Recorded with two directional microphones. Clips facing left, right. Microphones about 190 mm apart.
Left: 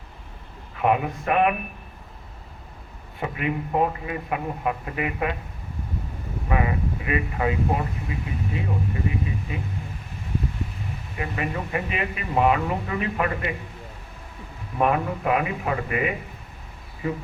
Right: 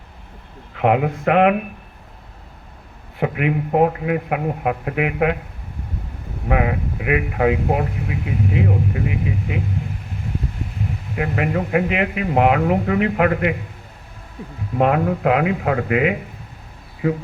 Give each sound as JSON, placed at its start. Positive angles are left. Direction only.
{"t": 0.8, "sound": "speech", "side_deg": -90}
{"t": 3.2, "sound": "speech", "side_deg": -80}
{"t": 6.5, "sound": "speech", "side_deg": -75}
{"t": 11.1, "sound": "speech", "side_deg": -80}
{"t": 14.8, "sound": "speech", "side_deg": -80}
{"t": 17.0, "sound": "speech", "side_deg": -70}